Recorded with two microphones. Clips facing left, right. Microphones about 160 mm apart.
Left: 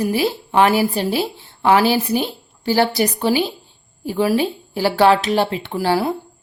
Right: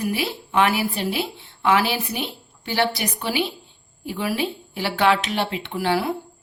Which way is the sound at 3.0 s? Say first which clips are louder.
Left 7 dB; 40° left (ahead or behind).